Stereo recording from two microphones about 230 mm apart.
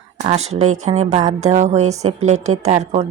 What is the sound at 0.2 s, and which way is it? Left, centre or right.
A woman's voice, right.